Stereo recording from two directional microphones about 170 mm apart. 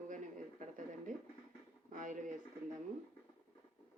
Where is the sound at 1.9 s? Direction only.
50° right (ahead or behind).